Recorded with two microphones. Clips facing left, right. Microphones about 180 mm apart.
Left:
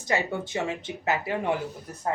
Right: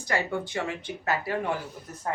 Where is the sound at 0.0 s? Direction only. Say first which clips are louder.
Left 1 dB; 25° left (ahead or behind).